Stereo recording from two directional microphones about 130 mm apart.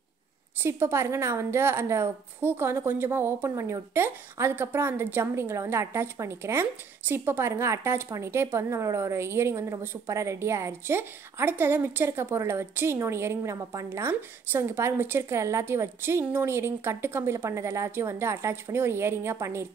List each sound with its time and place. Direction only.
0.6 s a woman's voice: 20° right (ahead or behind)